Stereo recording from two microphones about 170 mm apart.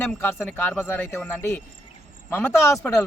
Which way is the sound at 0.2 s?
10° left (ahead or behind).